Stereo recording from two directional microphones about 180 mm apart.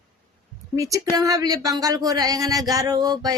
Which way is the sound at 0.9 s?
20° right (ahead or behind).